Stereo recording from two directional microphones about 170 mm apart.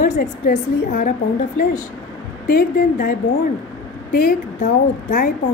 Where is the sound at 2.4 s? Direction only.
55° left (ahead or behind).